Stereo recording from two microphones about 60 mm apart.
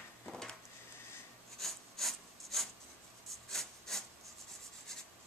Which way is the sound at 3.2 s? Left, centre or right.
Centre.